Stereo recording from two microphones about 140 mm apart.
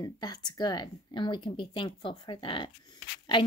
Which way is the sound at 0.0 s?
30° left (ahead or behind).